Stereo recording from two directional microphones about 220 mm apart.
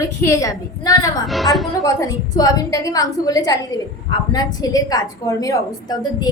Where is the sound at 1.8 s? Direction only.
15° left (ahead or behind).